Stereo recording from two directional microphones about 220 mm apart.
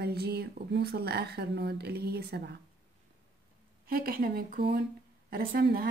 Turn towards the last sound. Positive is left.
turn(degrees=-40)  # may be behind; listen again after turning